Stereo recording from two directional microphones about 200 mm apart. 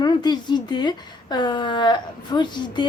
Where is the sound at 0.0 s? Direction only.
20° left (ahead or behind).